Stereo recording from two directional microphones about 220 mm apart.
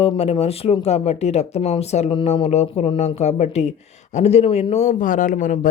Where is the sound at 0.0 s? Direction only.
25° left (ahead or behind).